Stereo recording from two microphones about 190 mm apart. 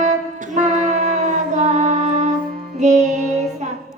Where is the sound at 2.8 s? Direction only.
40° right (ahead or behind).